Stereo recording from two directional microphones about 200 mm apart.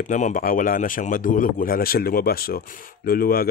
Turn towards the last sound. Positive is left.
turn(degrees=50)  # may be behind; listen again after turning